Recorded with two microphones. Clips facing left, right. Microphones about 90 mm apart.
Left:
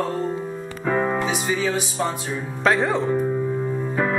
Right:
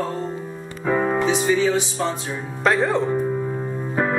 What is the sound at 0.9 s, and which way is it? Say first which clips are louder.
Music: right 2 dB; 5° right (ahead or behind).